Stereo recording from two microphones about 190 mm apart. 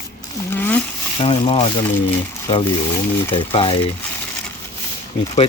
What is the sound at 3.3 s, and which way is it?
Speech, 30° left (ahead or behind).